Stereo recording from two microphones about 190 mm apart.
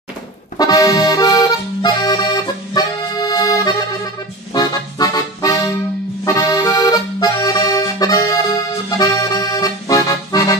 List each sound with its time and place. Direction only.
0.6 s accordion: 20° left (ahead or behind)